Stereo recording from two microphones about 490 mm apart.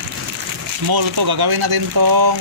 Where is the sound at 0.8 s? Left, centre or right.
Right.